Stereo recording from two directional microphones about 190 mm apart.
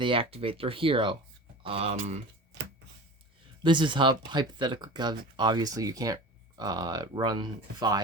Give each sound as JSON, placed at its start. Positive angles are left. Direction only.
{"t": 0.0, "sound": "speech", "side_deg": -30}
{"t": 3.6, "sound": "speech", "side_deg": -25}